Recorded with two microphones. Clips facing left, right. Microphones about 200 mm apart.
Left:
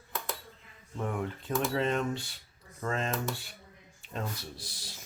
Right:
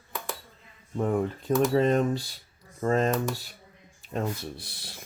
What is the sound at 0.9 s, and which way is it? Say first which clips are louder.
Speech: right 8 dB; 40° right (ahead or behind).